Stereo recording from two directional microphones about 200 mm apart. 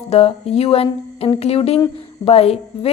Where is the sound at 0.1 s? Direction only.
30° left (ahead or behind).